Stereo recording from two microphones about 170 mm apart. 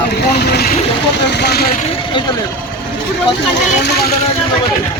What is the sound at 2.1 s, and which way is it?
Speech, 25° left (ahead or behind).